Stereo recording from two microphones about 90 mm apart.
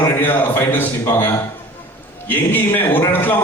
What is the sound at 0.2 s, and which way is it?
A man's voice, 25° left (ahead or behind).